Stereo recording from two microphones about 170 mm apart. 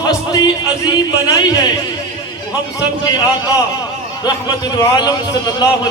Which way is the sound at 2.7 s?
25° left (ahead or behind).